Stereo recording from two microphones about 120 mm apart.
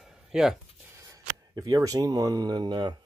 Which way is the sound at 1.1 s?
30° right (ahead or behind).